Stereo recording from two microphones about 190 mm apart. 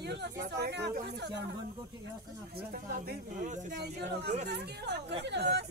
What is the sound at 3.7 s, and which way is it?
Speech, 60° right (ahead or behind).